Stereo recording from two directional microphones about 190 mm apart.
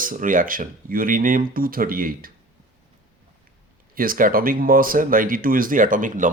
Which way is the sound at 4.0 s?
50° right (ahead or behind).